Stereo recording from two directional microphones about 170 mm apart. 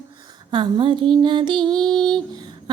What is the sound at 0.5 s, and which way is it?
Music, 25° right (ahead or behind).